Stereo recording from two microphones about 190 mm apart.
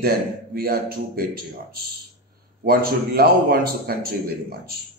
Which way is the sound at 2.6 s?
55° right (ahead or behind).